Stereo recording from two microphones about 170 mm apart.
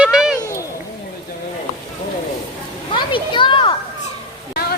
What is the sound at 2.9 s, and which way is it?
Children playing, 30° left (ahead or behind).